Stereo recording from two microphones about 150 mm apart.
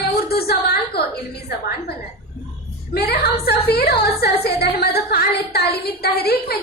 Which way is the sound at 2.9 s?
90° left.